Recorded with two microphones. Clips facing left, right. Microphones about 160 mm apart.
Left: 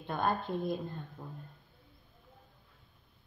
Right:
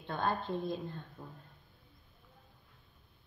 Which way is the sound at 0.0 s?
15° left (ahead or behind).